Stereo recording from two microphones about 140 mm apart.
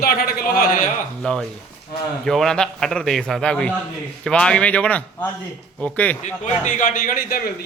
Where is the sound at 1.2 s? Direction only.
5° left (ahead or behind).